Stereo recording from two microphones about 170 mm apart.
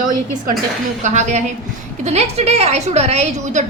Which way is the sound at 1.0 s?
45° right (ahead or behind).